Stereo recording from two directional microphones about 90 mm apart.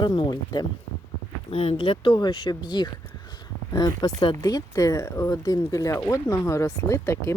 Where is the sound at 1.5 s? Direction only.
90° left; by 2.9 s 50° left (ahead or behind).